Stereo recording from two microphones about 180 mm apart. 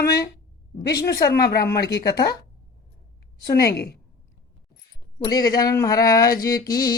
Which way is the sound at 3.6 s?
60° left (ahead or behind).